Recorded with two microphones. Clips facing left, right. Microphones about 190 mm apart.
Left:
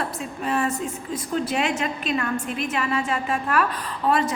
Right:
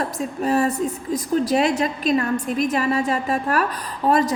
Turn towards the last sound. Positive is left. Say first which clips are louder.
# right 3 dB
turn(degrees=-40)  # may be behind; listen again after turning